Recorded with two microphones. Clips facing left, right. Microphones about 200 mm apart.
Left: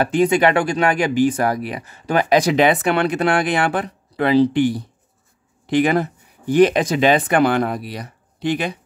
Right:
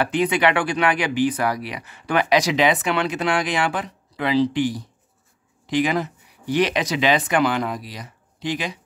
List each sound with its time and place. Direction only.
0.0 s speech: 45° left (ahead or behind); by 8.7 s 60° left (ahead or behind)